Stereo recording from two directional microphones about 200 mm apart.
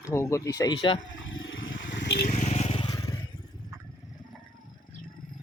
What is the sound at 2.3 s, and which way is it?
Vehicle, 35° left (ahead or behind).